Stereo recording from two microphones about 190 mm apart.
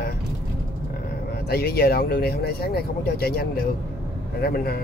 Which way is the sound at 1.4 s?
55° left (ahead or behind).